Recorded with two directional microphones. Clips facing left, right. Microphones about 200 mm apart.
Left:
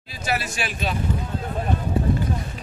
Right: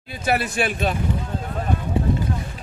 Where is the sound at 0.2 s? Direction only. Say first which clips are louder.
Right 5 dB; 55° right (ahead or behind).